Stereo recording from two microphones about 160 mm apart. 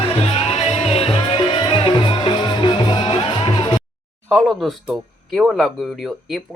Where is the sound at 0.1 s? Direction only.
40° left (ahead or behind).